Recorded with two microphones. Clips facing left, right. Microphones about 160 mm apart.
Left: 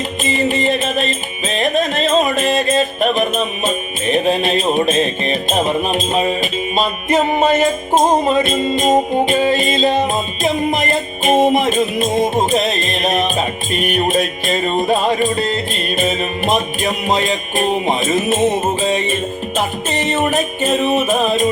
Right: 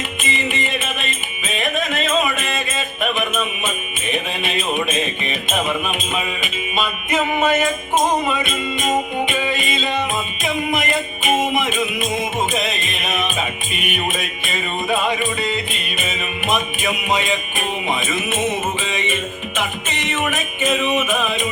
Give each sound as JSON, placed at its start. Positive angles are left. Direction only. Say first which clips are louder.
{"t": 0.3, "sound": "music", "louder": "left 8 dB", "side_deg": 40}